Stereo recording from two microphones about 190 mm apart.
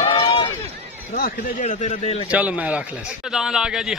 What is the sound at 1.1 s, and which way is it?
Speech, 50° left (ahead or behind).